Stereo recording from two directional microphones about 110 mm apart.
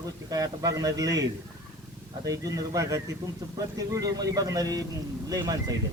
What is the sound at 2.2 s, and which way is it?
A man's voice, 35° right (ahead or behind).